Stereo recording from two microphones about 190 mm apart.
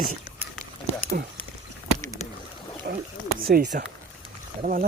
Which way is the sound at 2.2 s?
35° left (ahead or behind).